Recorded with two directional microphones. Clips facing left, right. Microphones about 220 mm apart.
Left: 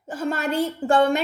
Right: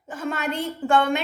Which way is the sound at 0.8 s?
30° left (ahead or behind).